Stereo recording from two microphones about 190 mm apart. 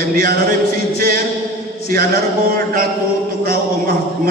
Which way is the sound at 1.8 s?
50° right (ahead or behind).